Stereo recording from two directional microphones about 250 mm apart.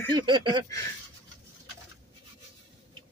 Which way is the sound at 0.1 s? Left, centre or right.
Centre.